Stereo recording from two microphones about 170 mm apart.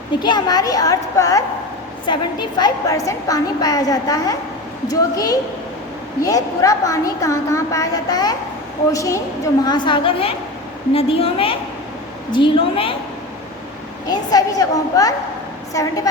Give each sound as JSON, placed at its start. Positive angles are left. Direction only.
{"t": 0.2, "sound": "a woman's voice", "side_deg": 25}
{"t": 14.1, "sound": "a woman's voice", "side_deg": 20}